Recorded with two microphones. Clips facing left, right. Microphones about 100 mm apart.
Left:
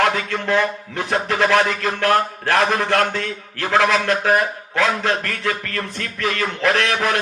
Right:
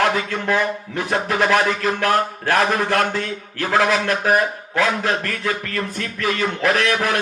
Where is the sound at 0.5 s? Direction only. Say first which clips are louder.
Left 1 dB; 25° right (ahead or behind).